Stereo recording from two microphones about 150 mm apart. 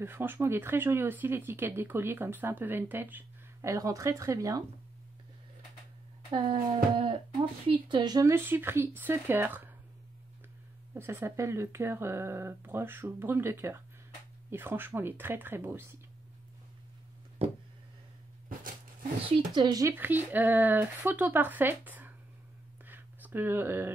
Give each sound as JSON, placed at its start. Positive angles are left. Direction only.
{"t": 0.0, "sound": "speech", "side_deg": -15}
{"t": 6.3, "sound": "speech", "side_deg": -35}
{"t": 11.0, "sound": "speech", "side_deg": -15}
{"t": 17.4, "sound": "speech", "side_deg": -40}
{"t": 19.2, "sound": "speech", "side_deg": -25}
{"t": 19.9, "sound": "speech", "side_deg": -15}
{"t": 22.8, "sound": "a sound", "side_deg": -15}